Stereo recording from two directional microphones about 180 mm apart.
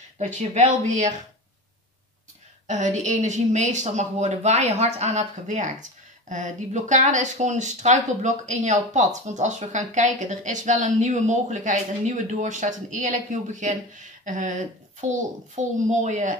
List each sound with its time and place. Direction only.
0.2 s a child's voice: 40° right (ahead or behind)
2.6 s a child's voice: 40° right (ahead or behind)